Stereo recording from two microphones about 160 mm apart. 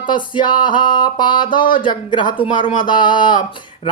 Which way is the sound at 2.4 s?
30° left (ahead or behind).